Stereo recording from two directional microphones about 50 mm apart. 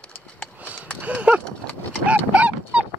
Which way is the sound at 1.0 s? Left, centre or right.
Right.